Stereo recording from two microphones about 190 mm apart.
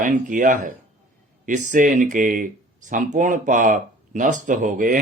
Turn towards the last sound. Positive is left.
turn(degrees=-45)  # may be behind; listen again after turning